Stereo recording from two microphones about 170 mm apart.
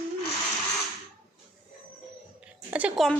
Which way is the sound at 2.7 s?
5° right (ahead or behind).